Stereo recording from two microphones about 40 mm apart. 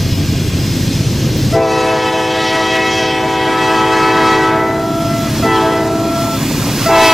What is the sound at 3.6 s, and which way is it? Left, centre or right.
Train, centre.